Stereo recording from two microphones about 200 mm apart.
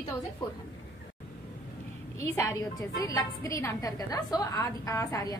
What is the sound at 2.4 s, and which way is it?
A woman's voice, 15° left (ahead or behind).